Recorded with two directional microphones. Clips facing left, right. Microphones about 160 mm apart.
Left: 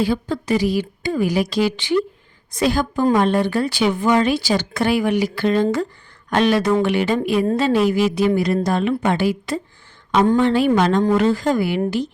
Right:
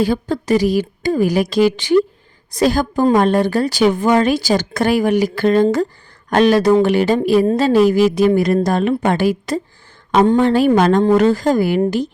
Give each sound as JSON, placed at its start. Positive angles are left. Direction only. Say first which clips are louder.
{"t": 0.0, "sound": "a woman's voice", "louder": "right 3 dB", "side_deg": -40}